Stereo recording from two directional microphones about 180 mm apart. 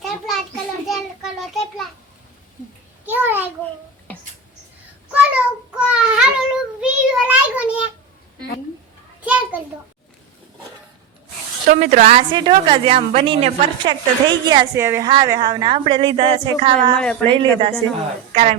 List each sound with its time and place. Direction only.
0.9 s child singing: centre (ahead or behind)
3.1 s a sound: 10° right (ahead or behind)
5.1 s child singing: 5° right (ahead or behind)
9.2 s a sound: 10° right (ahead or behind)
11.7 s a woman's voice: 40° right (ahead or behind)
12.3 s a woman's voice: 25° right (ahead or behind)
16.9 s speech: 5° left (ahead or behind)
17.4 s a woman's voice: 30° right (ahead or behind)